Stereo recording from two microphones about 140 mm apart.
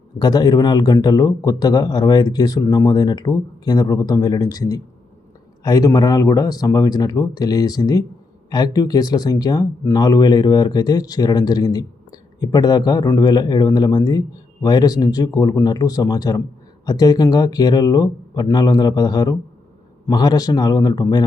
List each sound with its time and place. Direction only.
0.2 s speech: 30° left (ahead or behind)